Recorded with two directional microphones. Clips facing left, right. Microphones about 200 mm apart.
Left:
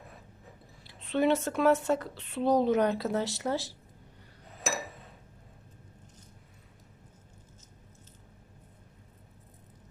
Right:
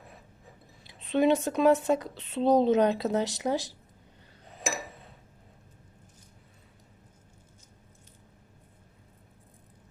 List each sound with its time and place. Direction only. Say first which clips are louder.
0.9 s speech: right 3 dB; 15° right (ahead or behind)